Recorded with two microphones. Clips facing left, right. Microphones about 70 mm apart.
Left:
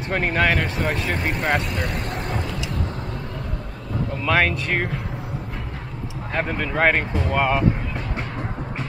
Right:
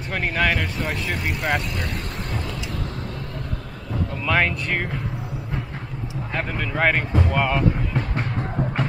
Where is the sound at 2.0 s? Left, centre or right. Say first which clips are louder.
Left 4 dB; left.